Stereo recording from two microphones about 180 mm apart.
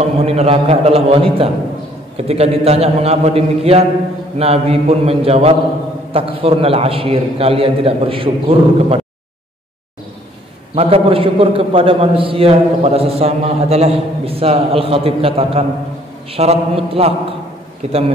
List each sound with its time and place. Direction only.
0.0 s a man's voice: 35° right (ahead or behind)
10.7 s a man's voice: 35° right (ahead or behind)